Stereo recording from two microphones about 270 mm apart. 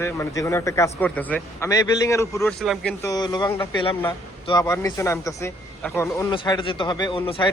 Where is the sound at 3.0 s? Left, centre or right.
Centre.